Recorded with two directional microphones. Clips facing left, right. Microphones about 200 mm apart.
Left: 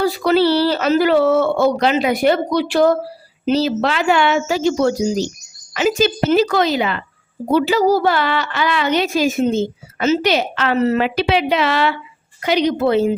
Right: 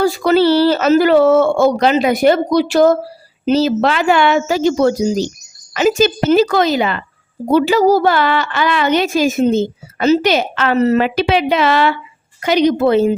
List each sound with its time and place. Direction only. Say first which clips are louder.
0.0 s a child's voice: right 3 dB; 45° right (ahead or behind)